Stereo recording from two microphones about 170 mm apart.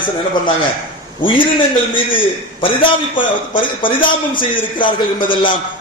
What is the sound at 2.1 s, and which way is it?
A man's voice, 30° left (ahead or behind).